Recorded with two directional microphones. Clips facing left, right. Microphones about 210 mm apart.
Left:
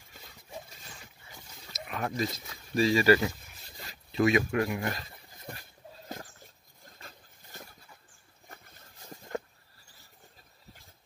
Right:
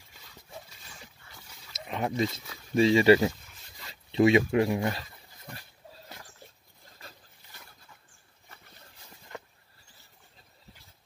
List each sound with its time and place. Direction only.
1.7 s wild animals: 25° right (ahead or behind)
2.7 s speech: 25° right (ahead or behind)